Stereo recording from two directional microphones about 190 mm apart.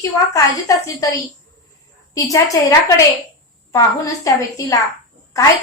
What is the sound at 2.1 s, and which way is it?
Speech, 15° left (ahead or behind).